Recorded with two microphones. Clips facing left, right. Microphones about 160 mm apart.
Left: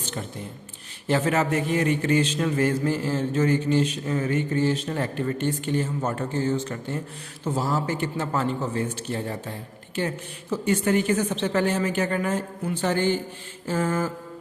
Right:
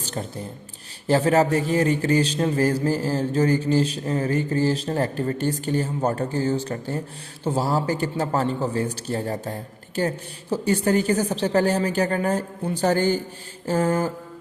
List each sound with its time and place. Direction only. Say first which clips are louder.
0.0 s a man's voice: right 3 dB; 35° right (ahead or behind)